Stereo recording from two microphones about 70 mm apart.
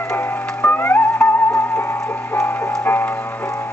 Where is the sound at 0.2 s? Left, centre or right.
Left.